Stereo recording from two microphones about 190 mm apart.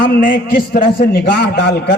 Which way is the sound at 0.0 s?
45° left (ahead or behind).